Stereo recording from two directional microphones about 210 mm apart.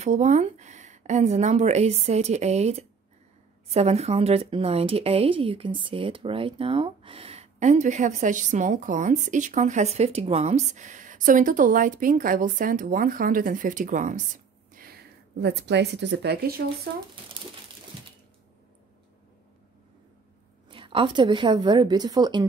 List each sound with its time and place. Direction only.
0.0 s a woman's voice: 35° right (ahead or behind)
20.7 s a woman's voice: 25° right (ahead or behind)